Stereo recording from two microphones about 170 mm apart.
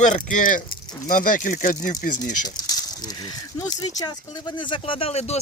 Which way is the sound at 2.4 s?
20° left (ahead or behind).